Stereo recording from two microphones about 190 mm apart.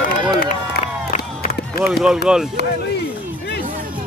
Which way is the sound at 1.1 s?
45° left (ahead or behind).